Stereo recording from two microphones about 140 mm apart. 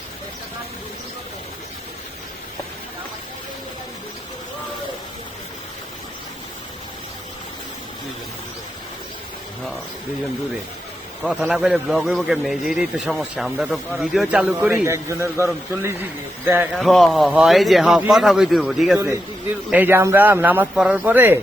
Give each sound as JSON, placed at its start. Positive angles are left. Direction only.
{"t": 11.3, "sound": "a man's voice", "side_deg": -5}
{"t": 14.8, "sound": "a man's voice", "side_deg": -20}
{"t": 16.7, "sound": "a man's voice", "side_deg": 0}
{"t": 19.7, "sound": "a man's voice", "side_deg": -15}